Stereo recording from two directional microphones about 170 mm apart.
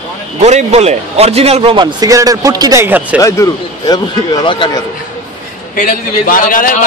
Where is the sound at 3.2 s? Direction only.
20° left (ahead or behind).